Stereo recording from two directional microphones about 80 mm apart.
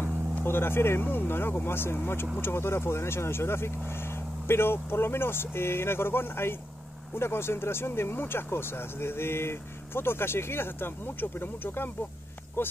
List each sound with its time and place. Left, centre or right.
0.4 s speech: left